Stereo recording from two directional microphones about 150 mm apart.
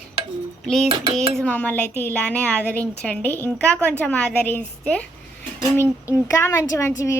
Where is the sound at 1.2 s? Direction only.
5° left (ahead or behind).